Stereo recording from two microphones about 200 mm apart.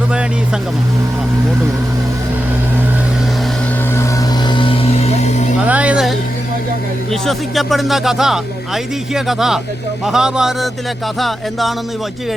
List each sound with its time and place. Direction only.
4.4 s vehicle: 25° left (ahead or behind)
5.6 s music: 5° right (ahead or behind)
7.1 s speech: centre (ahead or behind)